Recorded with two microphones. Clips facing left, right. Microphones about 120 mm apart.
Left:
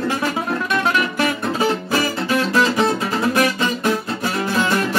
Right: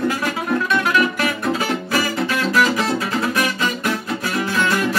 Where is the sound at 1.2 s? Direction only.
20° left (ahead or behind).